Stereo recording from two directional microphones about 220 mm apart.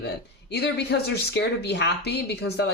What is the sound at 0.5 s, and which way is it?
Speech, 50° left (ahead or behind).